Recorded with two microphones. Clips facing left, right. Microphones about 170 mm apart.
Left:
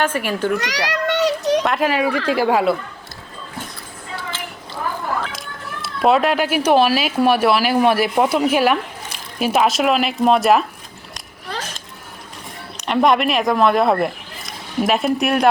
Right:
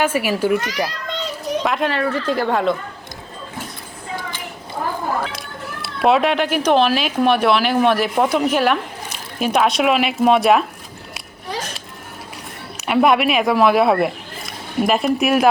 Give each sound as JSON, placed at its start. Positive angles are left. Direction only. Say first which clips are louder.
{"t": 0.0, "sound": "a child's voice", "louder": "right 2 dB", "side_deg": -10}
{"t": 0.6, "sound": "children playing", "louder": "left 2 dB", "side_deg": 80}
{"t": 1.6, "sound": "speech", "louder": "left 1 dB", "side_deg": 0}
{"t": 4.3, "sound": "a sound", "louder": "left 1 dB", "side_deg": -15}
{"t": 5.3, "sound": "speech", "louder": "right 1 dB", "side_deg": 0}
{"t": 11.1, "sound": "a sound", "louder": "right 2 dB", "side_deg": -10}
{"t": 12.7, "sound": "speech", "louder": "right 1 dB", "side_deg": -5}